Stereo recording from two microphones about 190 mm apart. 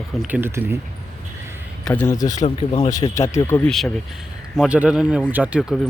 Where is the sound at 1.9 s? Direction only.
10° left (ahead or behind).